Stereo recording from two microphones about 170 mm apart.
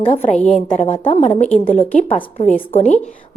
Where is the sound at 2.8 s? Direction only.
45° left (ahead or behind).